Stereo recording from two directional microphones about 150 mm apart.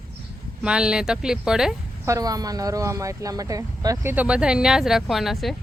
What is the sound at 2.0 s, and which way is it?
Speech, 20° right (ahead or behind).